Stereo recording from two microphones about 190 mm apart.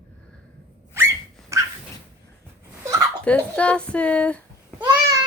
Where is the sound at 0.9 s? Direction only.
15° right (ahead or behind).